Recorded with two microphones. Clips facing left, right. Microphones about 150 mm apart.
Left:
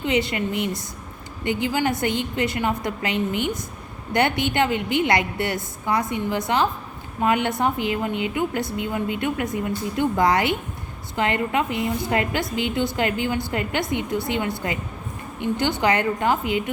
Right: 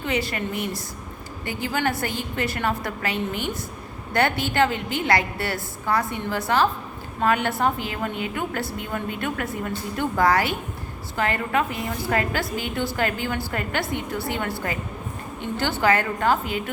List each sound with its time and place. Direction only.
0.0 s a woman's voice: 20° left (ahead or behind)